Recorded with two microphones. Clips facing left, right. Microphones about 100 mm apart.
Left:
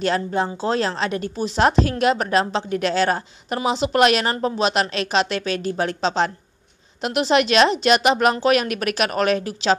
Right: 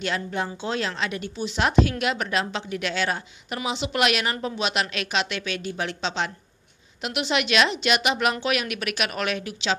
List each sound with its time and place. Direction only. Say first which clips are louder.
0.0 s a woman's voice: left 6 dB; 35° left (ahead or behind)